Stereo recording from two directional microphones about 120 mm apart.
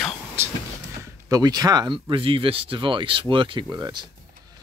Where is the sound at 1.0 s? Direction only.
30° right (ahead or behind).